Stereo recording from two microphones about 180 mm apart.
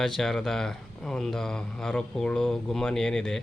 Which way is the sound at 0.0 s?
Centre (ahead or behind).